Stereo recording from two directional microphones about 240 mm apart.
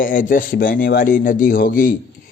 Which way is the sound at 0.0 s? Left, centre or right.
Left.